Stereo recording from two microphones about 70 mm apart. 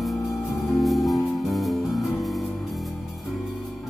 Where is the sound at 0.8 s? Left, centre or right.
Centre.